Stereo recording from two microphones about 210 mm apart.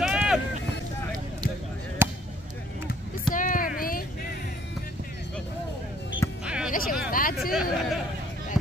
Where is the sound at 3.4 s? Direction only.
40° left (ahead or behind).